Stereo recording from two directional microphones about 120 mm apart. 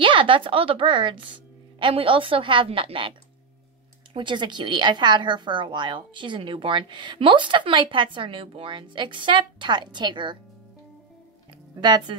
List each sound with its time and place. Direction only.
0.0 s a woman's voice: 45° right (ahead or behind)
11.8 s a woman's voice: 35° right (ahead or behind)